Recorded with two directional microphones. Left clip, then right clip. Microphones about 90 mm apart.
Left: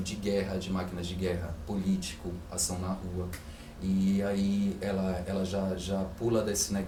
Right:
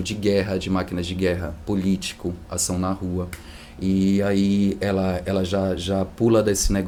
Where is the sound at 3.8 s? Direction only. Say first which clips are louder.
Right 10 dB; 40° right (ahead or behind).